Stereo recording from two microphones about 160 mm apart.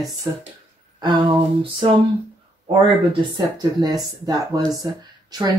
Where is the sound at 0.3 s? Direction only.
15° right (ahead or behind).